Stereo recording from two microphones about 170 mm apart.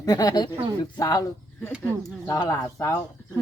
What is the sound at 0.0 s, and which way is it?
Speech, 20° left (ahead or behind).